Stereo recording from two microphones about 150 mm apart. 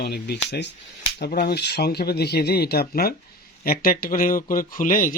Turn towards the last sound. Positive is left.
turn(degrees=65)  # may be behind; listen again after turning